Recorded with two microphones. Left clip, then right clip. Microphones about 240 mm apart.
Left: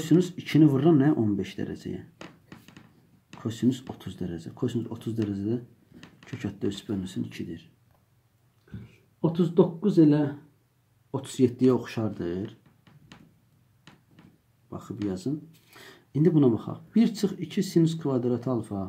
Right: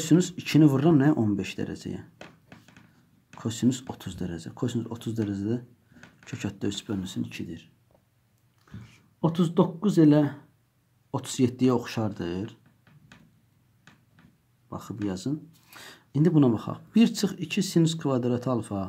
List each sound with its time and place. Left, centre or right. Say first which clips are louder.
0.0 s speech: even; right
3.3 s speech: even; right
9.2 s speech: left 2 dB; right
14.7 s speech: even; right